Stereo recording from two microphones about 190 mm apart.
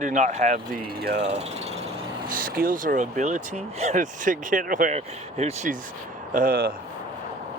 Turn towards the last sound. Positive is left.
turn(degrees=-50)  # may be behind; listen again after turning